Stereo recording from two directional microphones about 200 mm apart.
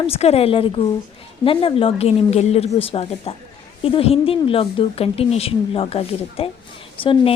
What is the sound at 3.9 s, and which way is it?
A woman's voice, 30° left (ahead or behind).